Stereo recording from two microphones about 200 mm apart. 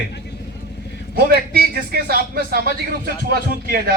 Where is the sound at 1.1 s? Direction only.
50° right (ahead or behind).